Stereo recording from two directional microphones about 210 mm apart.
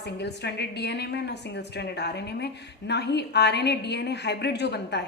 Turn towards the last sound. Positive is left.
turn(degrees=50)  # may be behind; listen again after turning